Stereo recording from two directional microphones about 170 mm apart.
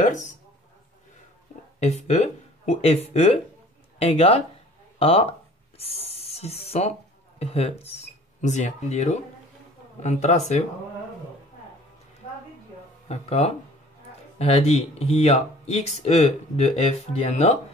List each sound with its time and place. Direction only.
0.0 s speech: 45° left (ahead or behind)
1.8 s speech: 40° left (ahead or behind)
5.8 s a sound: 35° left (ahead or behind)
7.3 s speech: 40° left (ahead or behind)
13.1 s speech: 35° left (ahead or behind)